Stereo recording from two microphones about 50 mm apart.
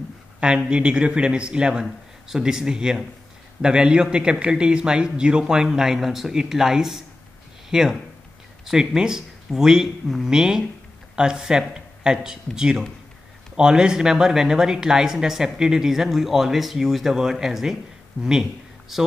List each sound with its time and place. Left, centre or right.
0.7 s a man's voice: right; by 19.0 s centre